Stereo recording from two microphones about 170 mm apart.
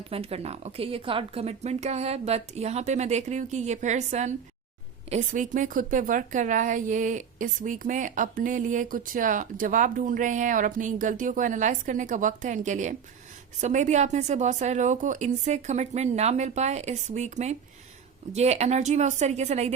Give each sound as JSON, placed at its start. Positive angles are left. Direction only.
{"t": 0.1, "sound": "a woman's voice", "side_deg": -35}